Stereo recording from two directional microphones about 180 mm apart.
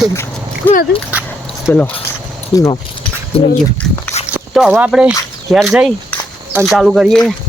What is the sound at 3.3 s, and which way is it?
Speech, 30° left (ahead or behind).